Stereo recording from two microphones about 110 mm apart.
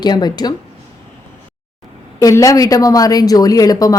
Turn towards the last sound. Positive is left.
turn(degrees=35)  # may be behind; listen again after turning